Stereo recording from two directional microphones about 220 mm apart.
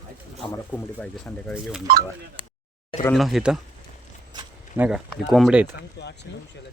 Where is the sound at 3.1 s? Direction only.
Centre (ahead or behind).